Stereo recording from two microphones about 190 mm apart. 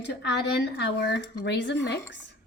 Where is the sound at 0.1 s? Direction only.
65° left (ahead or behind).